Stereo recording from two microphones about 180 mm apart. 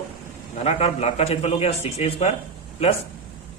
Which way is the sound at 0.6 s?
35° left (ahead or behind).